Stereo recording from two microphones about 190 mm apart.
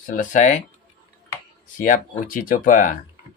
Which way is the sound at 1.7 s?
45° left (ahead or behind).